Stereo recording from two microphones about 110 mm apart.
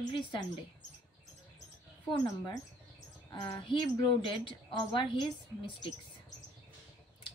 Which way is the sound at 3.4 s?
45° left (ahead or behind).